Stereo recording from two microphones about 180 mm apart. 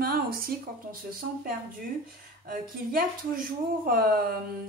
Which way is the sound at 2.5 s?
50° right (ahead or behind).